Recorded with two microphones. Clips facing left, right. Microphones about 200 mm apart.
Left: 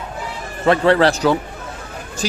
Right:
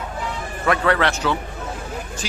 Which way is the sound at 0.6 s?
30° left (ahead or behind).